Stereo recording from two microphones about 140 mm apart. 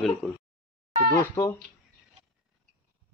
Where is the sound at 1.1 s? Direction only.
20° left (ahead or behind).